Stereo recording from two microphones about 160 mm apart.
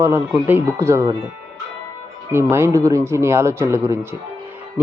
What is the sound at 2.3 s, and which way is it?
Speech, 15° right (ahead or behind).